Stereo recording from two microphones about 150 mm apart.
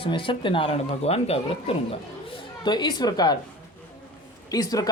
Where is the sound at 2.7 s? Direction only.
30° left (ahead or behind).